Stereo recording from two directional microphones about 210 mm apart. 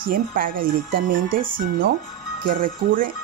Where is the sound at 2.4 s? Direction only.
40° right (ahead or behind).